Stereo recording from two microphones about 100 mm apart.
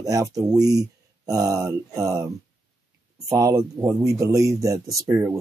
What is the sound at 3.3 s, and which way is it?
Speech, 35° right (ahead or behind).